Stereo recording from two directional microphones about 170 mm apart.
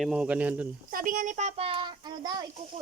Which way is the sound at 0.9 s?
55° right (ahead or behind).